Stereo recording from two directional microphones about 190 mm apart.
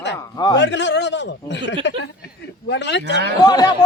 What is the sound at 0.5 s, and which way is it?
A man's voice, 65° left (ahead or behind).